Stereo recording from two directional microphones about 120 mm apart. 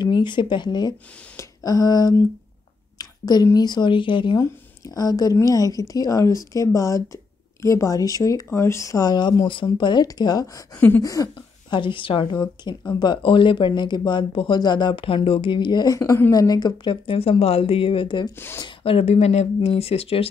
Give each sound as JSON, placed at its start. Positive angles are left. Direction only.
{"t": 0.0, "sound": "speech", "side_deg": 40}
{"t": 3.0, "sound": "a sound", "side_deg": 35}
{"t": 3.5, "sound": "speech", "side_deg": 35}
{"t": 4.4, "sound": "a woman's voice", "side_deg": 30}
{"t": 11.7, "sound": "speech", "side_deg": 45}